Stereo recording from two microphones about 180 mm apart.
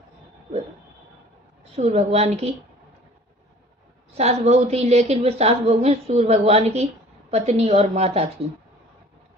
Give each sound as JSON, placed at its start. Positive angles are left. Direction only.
{"t": 1.7, "sound": "a woman's voice", "side_deg": -35}
{"t": 4.2, "sound": "a woman's voice", "side_deg": -35}